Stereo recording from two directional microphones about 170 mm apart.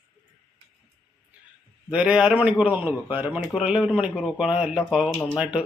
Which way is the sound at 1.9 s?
5° right (ahead or behind).